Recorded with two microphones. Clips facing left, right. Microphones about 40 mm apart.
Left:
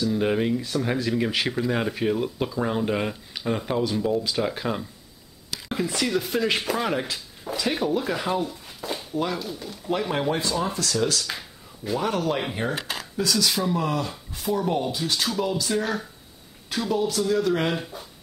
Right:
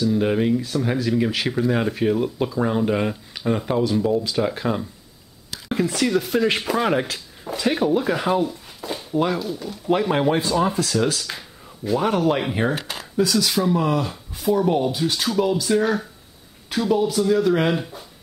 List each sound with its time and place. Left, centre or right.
0.0 s speech: centre
9.1 s speech: centre
9.4 s speech: centre
9.8 s speech: centre
11.2 s a sound: centre
12.0 s speech: centre